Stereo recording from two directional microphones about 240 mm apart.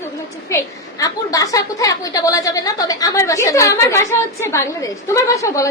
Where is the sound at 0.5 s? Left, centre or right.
Centre.